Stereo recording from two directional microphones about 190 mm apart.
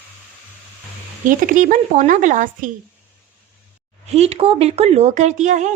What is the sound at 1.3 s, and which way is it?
Speech, 45° right (ahead or behind).